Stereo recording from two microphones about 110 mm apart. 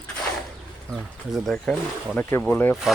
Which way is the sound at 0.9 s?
Centre (ahead or behind).